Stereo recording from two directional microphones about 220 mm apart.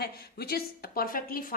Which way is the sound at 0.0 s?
45° left (ahead or behind).